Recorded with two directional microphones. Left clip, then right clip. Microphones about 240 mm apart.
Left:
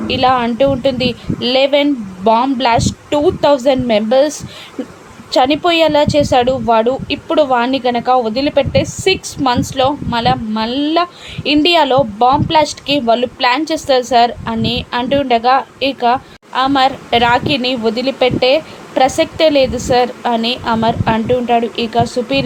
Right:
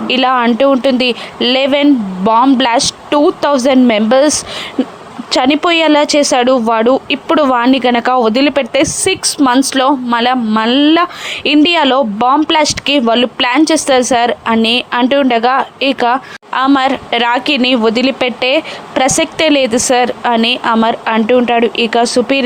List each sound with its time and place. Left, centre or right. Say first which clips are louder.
0.1 s speech: right 2 dB; right